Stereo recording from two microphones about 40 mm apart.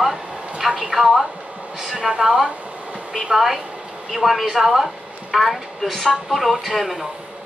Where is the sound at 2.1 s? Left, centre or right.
Right.